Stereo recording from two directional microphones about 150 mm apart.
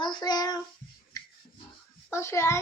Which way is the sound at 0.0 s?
30° left (ahead or behind).